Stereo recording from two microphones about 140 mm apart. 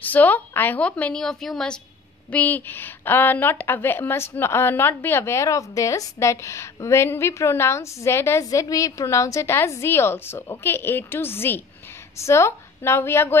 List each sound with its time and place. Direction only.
0.0 s a woman's voice: 10° left (ahead or behind)